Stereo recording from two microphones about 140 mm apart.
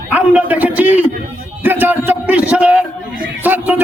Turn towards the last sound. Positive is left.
turn(degrees=-10)  # may be behind; listen again after turning